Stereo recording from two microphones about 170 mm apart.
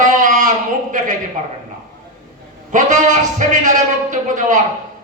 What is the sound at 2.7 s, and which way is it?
Speech, 45° right (ahead or behind).